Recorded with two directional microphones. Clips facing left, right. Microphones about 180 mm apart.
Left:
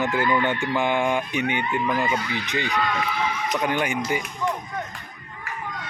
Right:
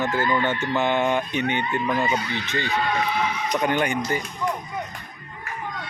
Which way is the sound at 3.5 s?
Centre (ahead or behind).